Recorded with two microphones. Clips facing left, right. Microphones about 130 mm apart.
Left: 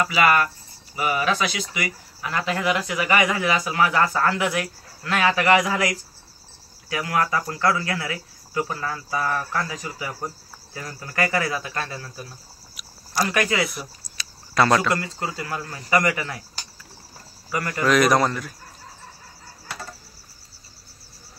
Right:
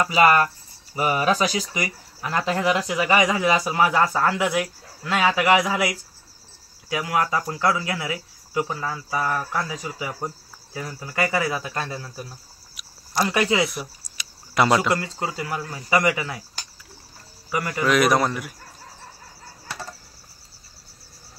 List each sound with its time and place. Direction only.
0.0 s speech: 30° right (ahead or behind)
3.2 s speech: 15° right (ahead or behind)
3.4 s speech: 25° right (ahead or behind)
12.7 s a sound: centre (ahead or behind)
13.3 s speech: 20° right (ahead or behind)
17.5 s speech: 15° right (ahead or behind)
17.8 s a man's voice: 5° right (ahead or behind)